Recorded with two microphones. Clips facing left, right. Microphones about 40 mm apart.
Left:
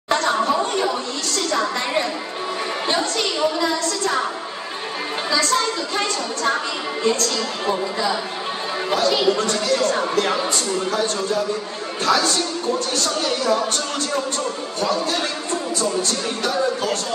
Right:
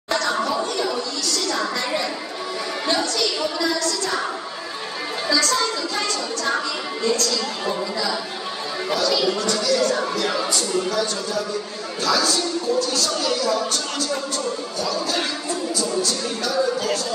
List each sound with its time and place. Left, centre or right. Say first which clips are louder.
0.1 s a sound: left 3 dB; left
2.9 s chatter: even; left
3.3 s a woman's voice: left 3 dB; left
3.8 s a woman's voice: left 2 dB; left
5.3 s a woman's voice: left 1 dB; left
8.9 s a woman's voice: left 3 dB; left
12.1 s a woman's voice: left 2 dB; left
15.8 s a woman's voice: left 2 dB; left